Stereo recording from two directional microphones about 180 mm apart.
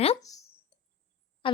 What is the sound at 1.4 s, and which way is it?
Speech, 30° left (ahead or behind).